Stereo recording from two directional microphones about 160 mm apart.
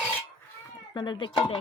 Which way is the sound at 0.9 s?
30° left (ahead or behind).